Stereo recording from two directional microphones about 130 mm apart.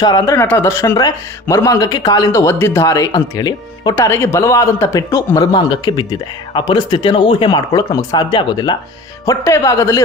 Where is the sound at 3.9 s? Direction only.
20° left (ahead or behind).